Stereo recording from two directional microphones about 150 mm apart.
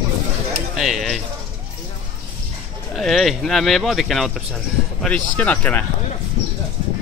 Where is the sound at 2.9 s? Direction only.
Centre (ahead or behind).